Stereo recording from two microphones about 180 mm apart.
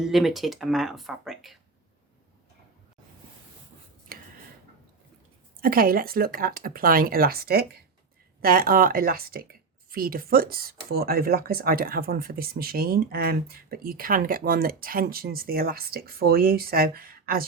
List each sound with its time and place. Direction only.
0.0 s speech: centre (ahead or behind)
4.1 s a sound: 55° right (ahead or behind)
5.5 s speech: 55° right (ahead or behind)